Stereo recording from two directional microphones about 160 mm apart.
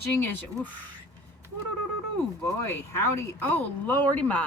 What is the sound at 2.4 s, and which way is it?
Speech, 15° left (ahead or behind).